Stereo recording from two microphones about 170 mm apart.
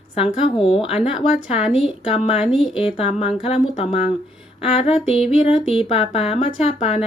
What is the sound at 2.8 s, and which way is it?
Speech, 35° left (ahead or behind).